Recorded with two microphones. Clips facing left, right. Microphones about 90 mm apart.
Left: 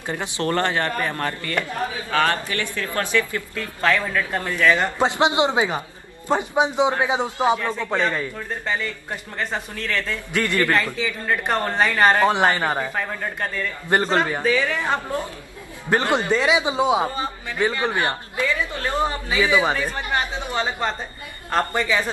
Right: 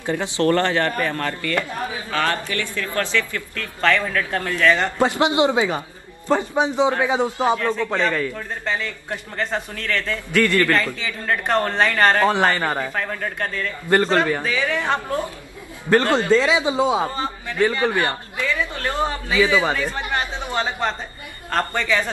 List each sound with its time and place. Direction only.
0.2 s a man's voice: 20° left (ahead or behind)
2.9 s a man's voice: 20° left (ahead or behind)
3.8 s a man's voice: 5° left (ahead or behind)
4.9 s a man's voice: 20° left (ahead or behind)
14.4 s a woman's voice: centre (ahead or behind)
15.9 s a man's voice: 20° left (ahead or behind)
20.1 s a man's voice: 5° left (ahead or behind)